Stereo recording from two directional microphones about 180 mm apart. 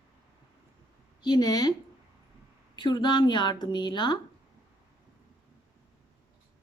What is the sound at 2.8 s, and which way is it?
A woman's voice, 25° left (ahead or behind).